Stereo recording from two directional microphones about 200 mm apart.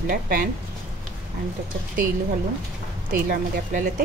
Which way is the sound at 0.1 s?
45° right (ahead or behind).